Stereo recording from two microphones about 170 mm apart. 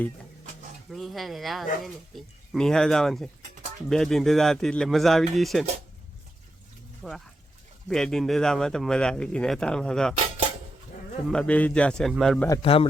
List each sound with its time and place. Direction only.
0.9 s speech: centre (ahead or behind)
7.0 s speech: centre (ahead or behind)
11.3 s speech: 5° left (ahead or behind)
12.6 s a man's voice: 35° left (ahead or behind)